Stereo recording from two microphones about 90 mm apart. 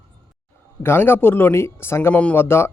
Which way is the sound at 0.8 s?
25° left (ahead or behind).